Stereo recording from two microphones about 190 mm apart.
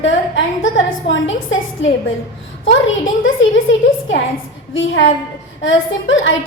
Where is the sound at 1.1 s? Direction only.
85° left.